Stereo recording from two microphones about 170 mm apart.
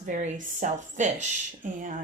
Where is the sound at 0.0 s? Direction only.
45° right (ahead or behind).